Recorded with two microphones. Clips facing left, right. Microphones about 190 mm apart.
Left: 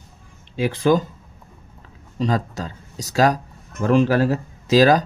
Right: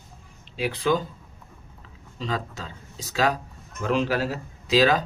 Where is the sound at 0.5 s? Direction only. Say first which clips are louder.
Left 6 dB; 45° left (ahead or behind).